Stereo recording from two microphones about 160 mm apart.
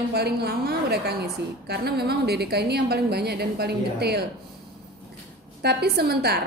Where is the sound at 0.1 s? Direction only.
90° right.